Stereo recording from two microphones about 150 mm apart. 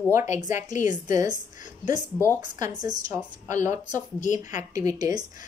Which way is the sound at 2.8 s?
25° right (ahead or behind).